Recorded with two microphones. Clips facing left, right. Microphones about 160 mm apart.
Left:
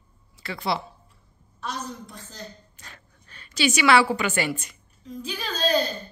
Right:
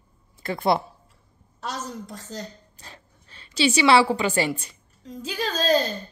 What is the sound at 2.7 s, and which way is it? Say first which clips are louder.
A woman's voice: right 2 dB; 30° right (ahead or behind).